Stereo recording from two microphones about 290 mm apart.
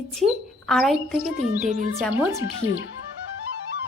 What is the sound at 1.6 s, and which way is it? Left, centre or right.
Speech, right.